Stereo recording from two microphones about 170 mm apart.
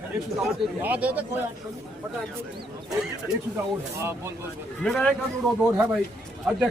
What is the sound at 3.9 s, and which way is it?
Speech, 15° right (ahead or behind).